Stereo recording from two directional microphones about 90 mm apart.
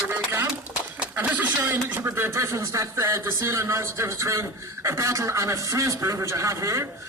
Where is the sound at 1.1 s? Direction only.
20° right (ahead or behind).